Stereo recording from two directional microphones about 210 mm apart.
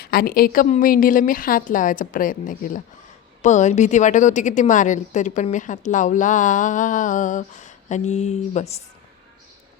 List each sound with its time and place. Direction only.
0.0 s a woman's voice: 45° left (ahead or behind)